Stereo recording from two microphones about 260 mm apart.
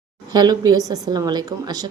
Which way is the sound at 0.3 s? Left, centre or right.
Centre.